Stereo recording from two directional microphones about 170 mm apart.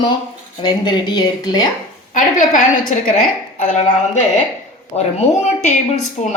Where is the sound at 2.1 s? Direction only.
50° left (ahead or behind).